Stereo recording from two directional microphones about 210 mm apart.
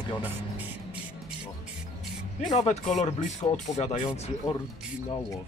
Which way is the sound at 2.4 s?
35° left (ahead or behind).